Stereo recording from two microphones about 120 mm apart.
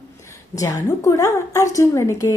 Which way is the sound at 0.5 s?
25° left (ahead or behind).